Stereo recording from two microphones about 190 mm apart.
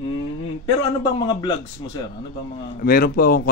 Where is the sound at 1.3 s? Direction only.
25° left (ahead or behind).